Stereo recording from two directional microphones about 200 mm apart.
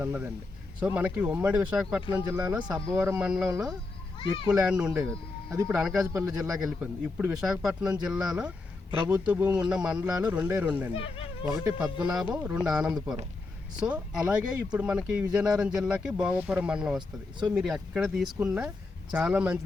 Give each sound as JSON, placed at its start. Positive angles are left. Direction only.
{"t": 0.0, "sound": "speech", "side_deg": -10}
{"t": 10.9, "sound": "speech", "side_deg": 25}
{"t": 12.1, "sound": "speech", "side_deg": -5}